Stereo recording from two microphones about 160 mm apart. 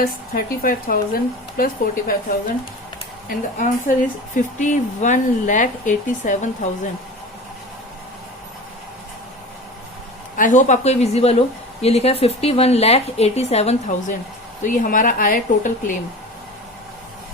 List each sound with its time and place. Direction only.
0.0 s speech: 65° left (ahead or behind)
3.2 s speech: 55° left (ahead or behind)
10.3 s speech: 55° left (ahead or behind)